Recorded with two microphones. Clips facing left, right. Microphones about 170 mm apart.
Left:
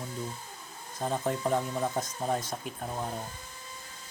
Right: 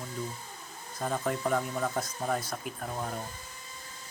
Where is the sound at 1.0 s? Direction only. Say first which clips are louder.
Left 1 dB; 25° left (ahead or behind).